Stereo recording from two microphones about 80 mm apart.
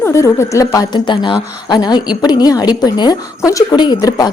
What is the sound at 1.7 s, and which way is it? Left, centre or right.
A woman's voice, left.